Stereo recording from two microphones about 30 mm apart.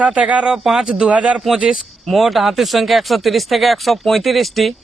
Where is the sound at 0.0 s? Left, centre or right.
Right.